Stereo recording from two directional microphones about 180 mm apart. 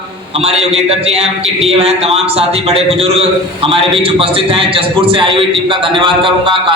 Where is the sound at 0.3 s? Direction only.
35° right (ahead or behind).